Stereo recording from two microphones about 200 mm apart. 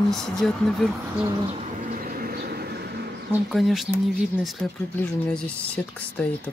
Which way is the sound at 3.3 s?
Centre (ahead or behind).